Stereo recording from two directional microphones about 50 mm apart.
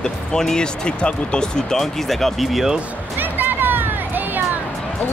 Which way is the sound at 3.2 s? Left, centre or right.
Right.